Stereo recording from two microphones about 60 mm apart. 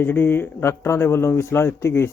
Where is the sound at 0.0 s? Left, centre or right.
Left.